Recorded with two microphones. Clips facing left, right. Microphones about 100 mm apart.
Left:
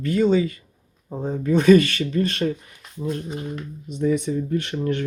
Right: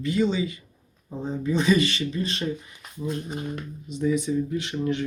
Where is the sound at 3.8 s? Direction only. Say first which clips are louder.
Left 2 dB; 60° left (ahead or behind).